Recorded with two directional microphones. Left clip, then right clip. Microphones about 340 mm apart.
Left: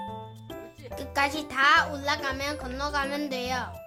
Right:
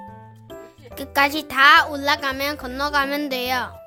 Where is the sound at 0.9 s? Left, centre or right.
Right.